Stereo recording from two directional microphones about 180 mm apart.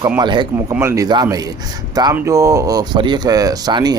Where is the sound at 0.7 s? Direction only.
15° right (ahead or behind).